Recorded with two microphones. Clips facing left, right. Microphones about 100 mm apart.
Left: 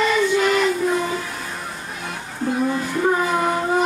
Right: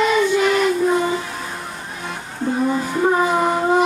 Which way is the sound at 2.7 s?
20° right (ahead or behind).